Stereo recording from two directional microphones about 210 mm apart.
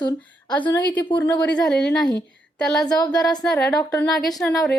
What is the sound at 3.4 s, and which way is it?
Speech, 5° left (ahead or behind).